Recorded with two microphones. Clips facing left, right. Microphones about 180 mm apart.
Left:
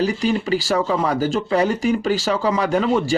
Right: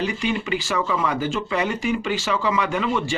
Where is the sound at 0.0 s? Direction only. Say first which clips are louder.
Left 5 dB; 35° left (ahead or behind).